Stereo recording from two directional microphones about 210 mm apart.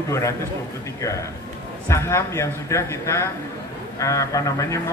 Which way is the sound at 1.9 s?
15° left (ahead or behind).